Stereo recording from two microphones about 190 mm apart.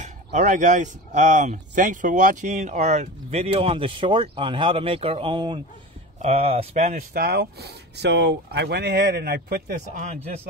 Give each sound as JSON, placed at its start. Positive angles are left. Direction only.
{"t": 0.0, "sound": "speech", "side_deg": -40}
{"t": 7.0, "sound": "speech", "side_deg": -55}
{"t": 9.8, "sound": "speech", "side_deg": -40}